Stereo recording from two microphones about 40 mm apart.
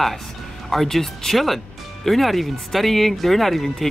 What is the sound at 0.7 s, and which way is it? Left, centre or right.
Speech, centre.